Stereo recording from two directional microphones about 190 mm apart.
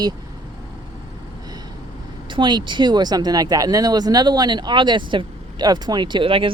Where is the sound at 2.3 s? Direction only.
25° right (ahead or behind).